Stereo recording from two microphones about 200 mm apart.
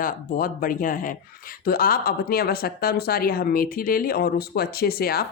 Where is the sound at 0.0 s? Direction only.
45° left (ahead or behind).